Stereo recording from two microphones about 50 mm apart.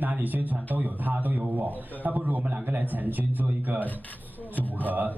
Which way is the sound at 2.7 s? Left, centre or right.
Right.